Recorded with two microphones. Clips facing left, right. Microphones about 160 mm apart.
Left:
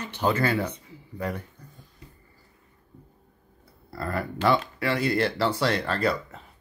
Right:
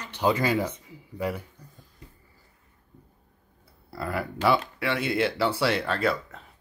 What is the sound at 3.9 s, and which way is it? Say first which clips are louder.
Speech: even; 5° right (ahead or behind).